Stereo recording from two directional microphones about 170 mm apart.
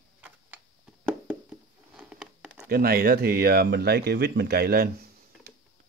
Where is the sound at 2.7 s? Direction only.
60° right (ahead or behind).